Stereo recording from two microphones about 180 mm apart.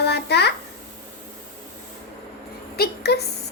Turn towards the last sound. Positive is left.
turn(degrees=65)  # may be behind; listen again after turning